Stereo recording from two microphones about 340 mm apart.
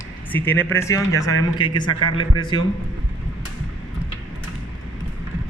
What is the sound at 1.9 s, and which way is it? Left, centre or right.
Speech, left.